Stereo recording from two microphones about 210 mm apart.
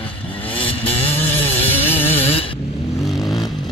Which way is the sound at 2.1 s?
30° left (ahead or behind).